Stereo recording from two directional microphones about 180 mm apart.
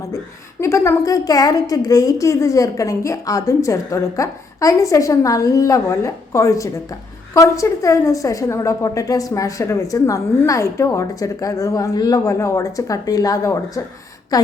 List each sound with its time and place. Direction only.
0.6 s a woman's voice: 15° left (ahead or behind)